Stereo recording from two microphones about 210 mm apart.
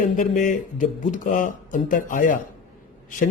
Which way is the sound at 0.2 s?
40° left (ahead or behind).